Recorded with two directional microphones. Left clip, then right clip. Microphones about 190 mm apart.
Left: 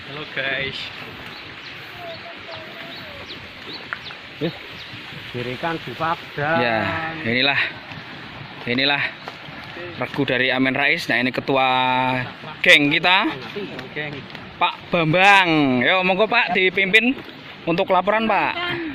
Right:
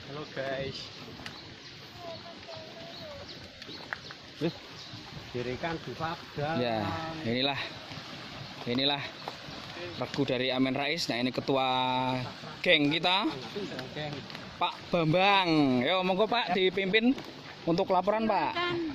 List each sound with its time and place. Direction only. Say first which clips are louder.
0.3 s speech: left 11 dB; 30° right (ahead or behind)
5.6 s speech: left 11 dB; 25° left (ahead or behind)
6.6 s speech: left 11 dB; 10° right (ahead or behind)
14.6 s speech: left 10 dB; 10° right (ahead or behind); by 17.2 s 25° right (ahead or behind)
17.7 s speech: left 9 dB; 15° right (ahead or behind)